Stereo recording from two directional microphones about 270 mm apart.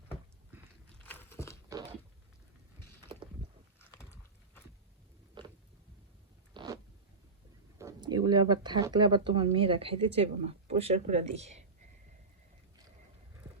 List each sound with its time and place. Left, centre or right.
1.0 s walk: centre
3.8 s clip-clop: centre
5.4 s a sound: centre
6.5 s zipper: centre
7.8 s speech: centre